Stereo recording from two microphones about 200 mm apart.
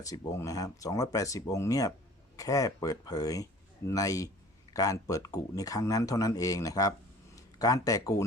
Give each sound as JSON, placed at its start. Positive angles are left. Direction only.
{"t": 0.0, "sound": "speech", "side_deg": 15}